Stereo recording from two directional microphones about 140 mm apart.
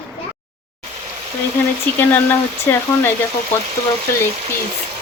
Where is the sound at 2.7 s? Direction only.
15° left (ahead or behind).